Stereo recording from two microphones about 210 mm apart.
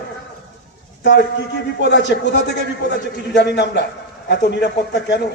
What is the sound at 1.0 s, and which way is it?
A man's voice, 55° left (ahead or behind).